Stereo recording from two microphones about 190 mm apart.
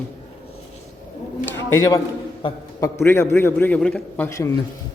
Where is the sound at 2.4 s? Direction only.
15° left (ahead or behind).